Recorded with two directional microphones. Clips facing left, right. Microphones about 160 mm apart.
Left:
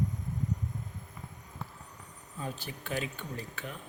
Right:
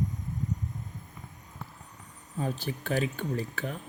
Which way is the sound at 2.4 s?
40° right (ahead or behind).